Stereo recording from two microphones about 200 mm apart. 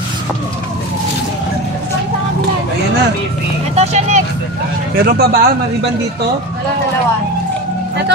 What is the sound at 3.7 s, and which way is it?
Speech, 35° right (ahead or behind).